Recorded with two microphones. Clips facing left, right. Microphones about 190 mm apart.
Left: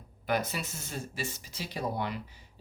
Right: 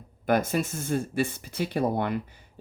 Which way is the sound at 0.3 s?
50° right (ahead or behind).